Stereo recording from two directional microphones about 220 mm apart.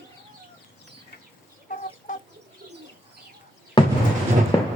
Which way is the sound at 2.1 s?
35° left (ahead or behind).